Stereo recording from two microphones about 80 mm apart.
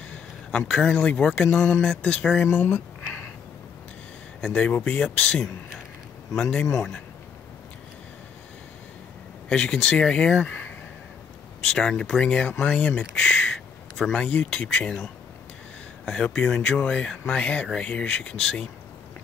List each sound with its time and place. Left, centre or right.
0.1 s speech: centre
2.5 s a sound: left
4.4 s speech: centre
9.5 s speech: centre
11.9 s speech: centre
16.1 s speech: centre